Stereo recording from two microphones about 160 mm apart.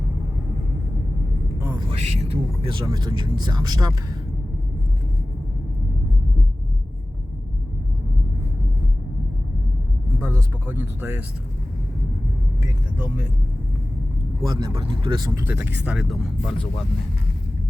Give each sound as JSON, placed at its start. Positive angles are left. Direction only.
{"t": 1.7, "sound": "speech", "side_deg": -35}
{"t": 10.2, "sound": "a sound", "side_deg": -15}
{"t": 14.4, "sound": "speech", "side_deg": -25}
{"t": 15.4, "sound": "speech", "side_deg": -15}